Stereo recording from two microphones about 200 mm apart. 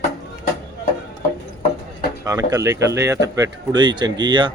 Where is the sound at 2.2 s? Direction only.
15° right (ahead or behind).